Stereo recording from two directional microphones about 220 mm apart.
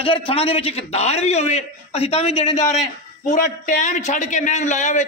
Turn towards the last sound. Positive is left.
turn(degrees=35)  # may be behind; listen again after turning